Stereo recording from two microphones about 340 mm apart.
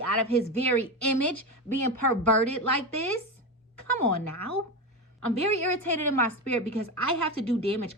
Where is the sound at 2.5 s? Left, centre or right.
Left.